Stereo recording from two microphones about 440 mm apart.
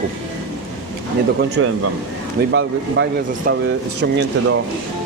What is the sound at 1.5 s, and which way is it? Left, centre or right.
Speech, right.